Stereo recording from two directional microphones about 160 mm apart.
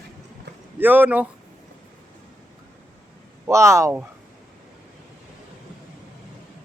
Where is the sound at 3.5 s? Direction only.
20° right (ahead or behind).